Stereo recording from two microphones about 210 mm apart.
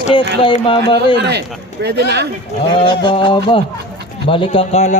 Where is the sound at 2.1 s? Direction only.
55° right (ahead or behind).